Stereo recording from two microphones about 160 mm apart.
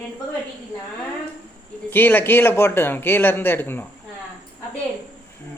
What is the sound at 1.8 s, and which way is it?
A man's voice, 15° left (ahead or behind).